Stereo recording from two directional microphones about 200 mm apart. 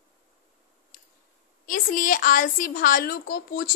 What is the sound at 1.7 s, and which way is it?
A woman's voice, 40° left (ahead or behind).